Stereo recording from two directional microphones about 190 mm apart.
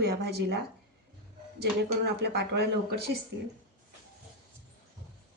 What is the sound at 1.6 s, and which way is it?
A woman's voice, 60° right (ahead or behind).